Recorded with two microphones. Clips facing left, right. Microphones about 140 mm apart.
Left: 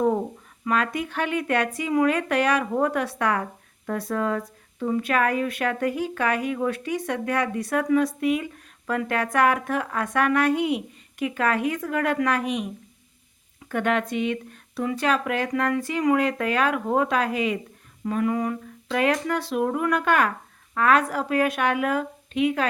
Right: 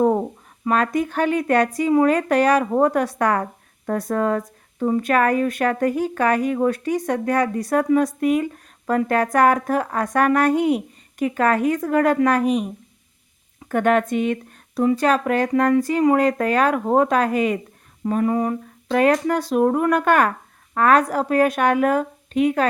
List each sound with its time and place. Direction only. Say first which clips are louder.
0.6 s a woman's voice: right 5 dB; 40° right (ahead or behind)
18.0 s a woman's voice: right 4 dB; 35° right (ahead or behind)